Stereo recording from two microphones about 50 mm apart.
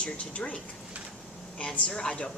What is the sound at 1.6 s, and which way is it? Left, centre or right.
Speech, left.